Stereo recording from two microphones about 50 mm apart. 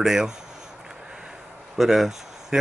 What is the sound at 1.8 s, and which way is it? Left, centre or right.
Speech, centre.